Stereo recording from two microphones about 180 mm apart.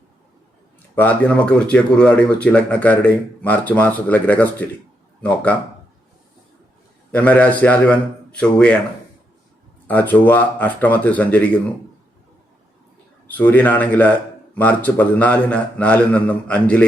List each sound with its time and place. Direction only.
0.9 s a man's voice: 10° left (ahead or behind)
7.1 s a man's voice: 10° left (ahead or behind)
9.8 s a man's voice: 10° left (ahead or behind)
13.2 s a man's voice: 10° left (ahead or behind)